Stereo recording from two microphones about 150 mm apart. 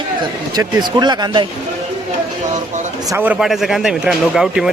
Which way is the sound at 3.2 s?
5° right (ahead or behind).